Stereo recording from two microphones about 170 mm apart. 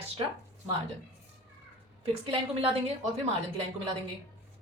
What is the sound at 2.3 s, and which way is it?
Speech, 35° right (ahead or behind).